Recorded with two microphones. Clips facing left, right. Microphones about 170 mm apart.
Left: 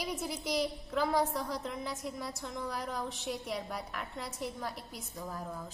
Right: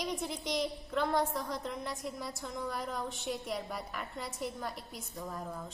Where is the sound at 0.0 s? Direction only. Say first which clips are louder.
Even; 5° left (ahead or behind).